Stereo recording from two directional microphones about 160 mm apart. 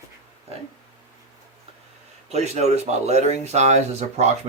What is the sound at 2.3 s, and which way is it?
Speech, 45° right (ahead or behind).